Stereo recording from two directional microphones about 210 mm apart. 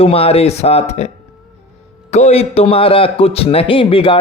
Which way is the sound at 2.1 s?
30° left (ahead or behind).